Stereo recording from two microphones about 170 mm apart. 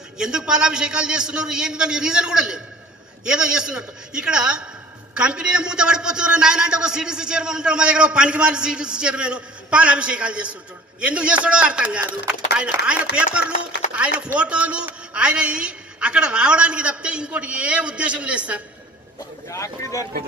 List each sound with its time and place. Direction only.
0.2 s a man's voice: 5° right (ahead or behind)
19.5 s speech: 20° left (ahead or behind)